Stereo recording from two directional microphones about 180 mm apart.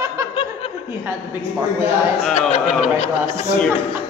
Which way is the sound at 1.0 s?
10° right (ahead or behind).